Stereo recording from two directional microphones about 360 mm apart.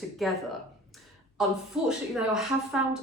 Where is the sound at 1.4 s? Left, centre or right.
Centre.